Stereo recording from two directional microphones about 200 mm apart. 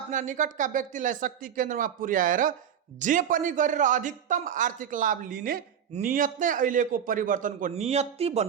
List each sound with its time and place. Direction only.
0.1 s a man's voice: 40° right (ahead or behind)